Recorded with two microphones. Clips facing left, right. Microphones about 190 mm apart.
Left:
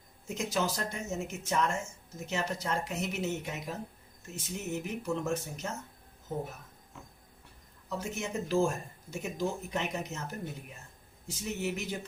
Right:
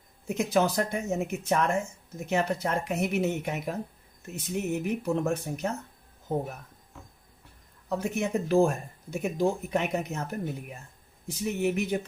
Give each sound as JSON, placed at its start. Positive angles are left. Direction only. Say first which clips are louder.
{"t": 0.3, "sound": "speech", "louder": "right 7 dB", "side_deg": -60}
{"t": 7.9, "sound": "speech", "louder": "right 7 dB", "side_deg": -60}